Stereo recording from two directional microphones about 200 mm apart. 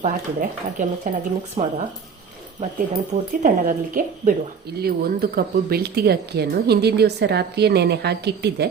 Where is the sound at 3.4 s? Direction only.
40° right (ahead or behind).